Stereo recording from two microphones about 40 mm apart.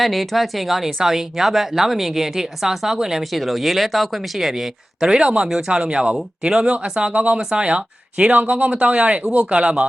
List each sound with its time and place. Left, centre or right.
0.0 s speech: centre; by 7.1 s right
7.1 s speech: right
7.3 s speech: right
8.2 s speech: right